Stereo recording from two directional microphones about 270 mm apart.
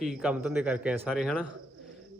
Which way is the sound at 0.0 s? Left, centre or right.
Centre.